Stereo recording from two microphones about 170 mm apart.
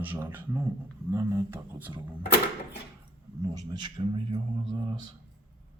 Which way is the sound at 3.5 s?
25° right (ahead or behind).